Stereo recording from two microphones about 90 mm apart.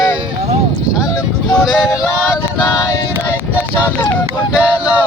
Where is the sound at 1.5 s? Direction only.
Centre (ahead or behind).